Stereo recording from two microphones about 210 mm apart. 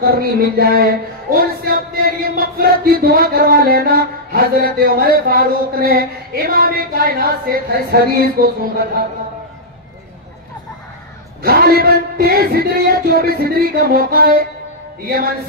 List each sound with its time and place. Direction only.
0.0 s music: 45° right (ahead or behind)
11.4 s music: 45° right (ahead or behind)